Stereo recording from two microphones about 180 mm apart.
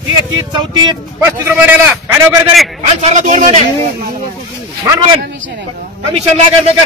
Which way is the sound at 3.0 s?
40° right (ahead or behind).